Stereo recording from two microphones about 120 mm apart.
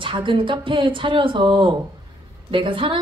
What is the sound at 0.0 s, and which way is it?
Speech, 45° right (ahead or behind).